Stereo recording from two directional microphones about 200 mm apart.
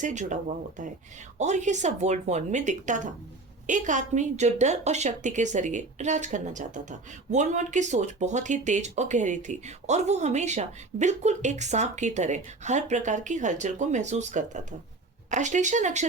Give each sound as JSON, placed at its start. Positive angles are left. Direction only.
{"t": 0.0, "sound": "a woman's voice", "side_deg": -40}